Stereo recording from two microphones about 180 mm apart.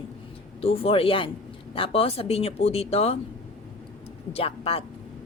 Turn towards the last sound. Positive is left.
turn(degrees=30)  # may be behind; listen again after turning